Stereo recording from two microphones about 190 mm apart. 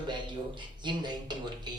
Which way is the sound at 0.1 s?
25° right (ahead or behind).